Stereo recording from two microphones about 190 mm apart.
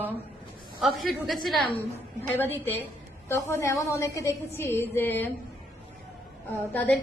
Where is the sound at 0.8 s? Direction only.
Centre (ahead or behind).